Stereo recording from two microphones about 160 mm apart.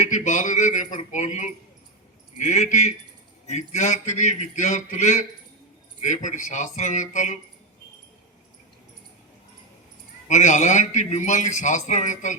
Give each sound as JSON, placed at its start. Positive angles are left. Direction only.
{"t": 0.1, "sound": "a man's voice", "side_deg": 50}
{"t": 10.2, "sound": "a man's voice", "side_deg": 50}